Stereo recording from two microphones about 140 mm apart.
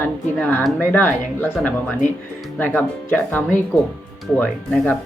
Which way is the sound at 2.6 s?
15° left (ahead or behind).